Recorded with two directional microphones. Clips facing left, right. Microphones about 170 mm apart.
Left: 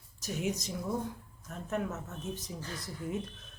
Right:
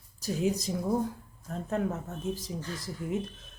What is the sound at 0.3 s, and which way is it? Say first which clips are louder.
Speech: right 6 dB; 35° right (ahead or behind).